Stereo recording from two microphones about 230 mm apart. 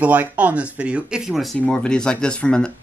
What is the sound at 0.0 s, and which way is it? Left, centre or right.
Speech, centre.